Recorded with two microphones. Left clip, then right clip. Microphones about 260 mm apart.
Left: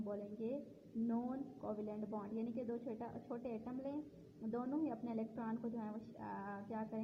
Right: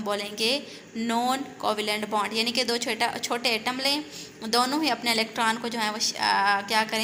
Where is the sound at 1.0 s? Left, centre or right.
Left.